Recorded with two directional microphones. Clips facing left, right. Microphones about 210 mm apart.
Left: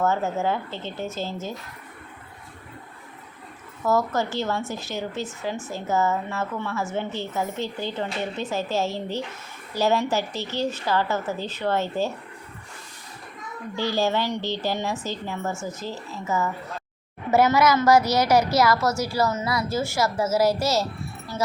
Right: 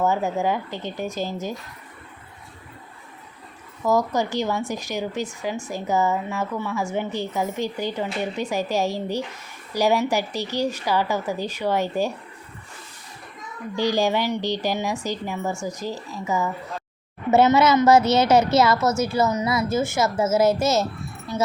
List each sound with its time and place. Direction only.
0.0 s a woman's voice: 15° right (ahead or behind)
3.8 s a woman's voice: 15° right (ahead or behind)
13.7 s a woman's voice: 15° right (ahead or behind)
17.3 s a woman's voice: 25° right (ahead or behind)